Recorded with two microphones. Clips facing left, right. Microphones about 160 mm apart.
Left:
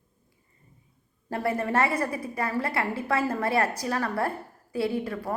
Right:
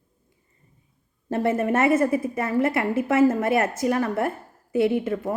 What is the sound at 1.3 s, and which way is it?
A woman's voice, 25° right (ahead or behind).